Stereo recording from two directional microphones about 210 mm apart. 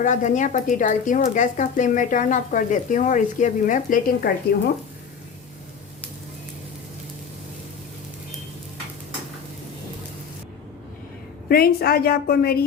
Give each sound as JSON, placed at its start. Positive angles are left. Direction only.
{"t": 0.0, "sound": "speech", "side_deg": 35}
{"t": 11.4, "sound": "a woman's voice", "side_deg": 45}